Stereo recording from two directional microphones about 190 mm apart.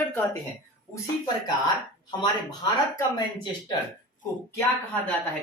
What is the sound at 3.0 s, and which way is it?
Speech, 20° left (ahead or behind).